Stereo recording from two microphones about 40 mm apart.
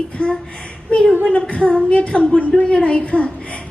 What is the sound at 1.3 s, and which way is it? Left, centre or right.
A woman's voice, left.